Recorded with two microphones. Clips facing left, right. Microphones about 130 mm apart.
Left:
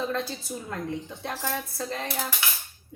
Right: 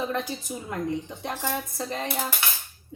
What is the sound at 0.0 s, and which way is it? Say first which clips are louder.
A woman's voice: right 1 dB; 15° right (ahead or behind).